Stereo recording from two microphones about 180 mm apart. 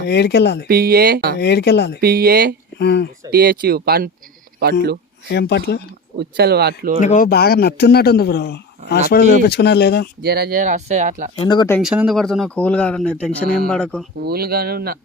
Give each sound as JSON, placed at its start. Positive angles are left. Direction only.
{"t": 0.0, "sound": "speech", "side_deg": 70}
{"t": 0.7, "sound": "speech", "side_deg": -55}
{"t": 1.4, "sound": "speech", "side_deg": 70}
{"t": 2.0, "sound": "speech", "side_deg": -55}
{"t": 2.7, "sound": "speech", "side_deg": 70}
{"t": 3.3, "sound": "speech", "side_deg": -55}
{"t": 5.3, "sound": "speech", "side_deg": 70}
{"t": 6.1, "sound": "speech", "side_deg": -60}
{"t": 7.0, "sound": "speech", "side_deg": 45}
{"t": 7.3, "sound": "a man's voice", "side_deg": 60}
{"t": 10.2, "sound": "speech", "side_deg": -60}
{"t": 11.3, "sound": "speech", "side_deg": 25}
{"t": 11.8, "sound": "speech", "side_deg": -5}
{"t": 14.2, "sound": "speech", "side_deg": -60}